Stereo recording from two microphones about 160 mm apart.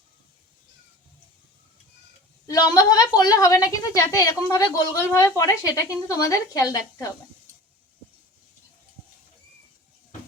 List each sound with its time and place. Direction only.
2.5 s a woman's voice: 25° left (ahead or behind)